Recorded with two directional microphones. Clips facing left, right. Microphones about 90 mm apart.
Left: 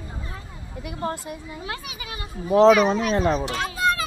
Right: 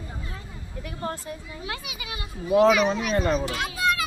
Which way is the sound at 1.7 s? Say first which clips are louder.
Even; 35° left (ahead or behind).